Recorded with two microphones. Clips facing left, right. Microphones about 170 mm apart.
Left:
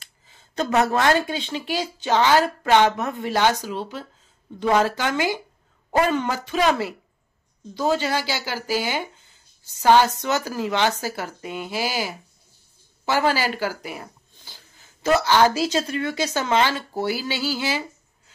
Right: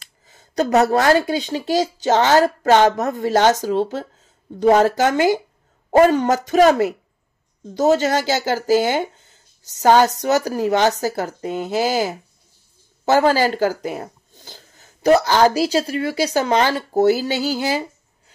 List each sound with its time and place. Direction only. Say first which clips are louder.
0.3 s a woman's voice: right 6 dB; 40° right (ahead or behind)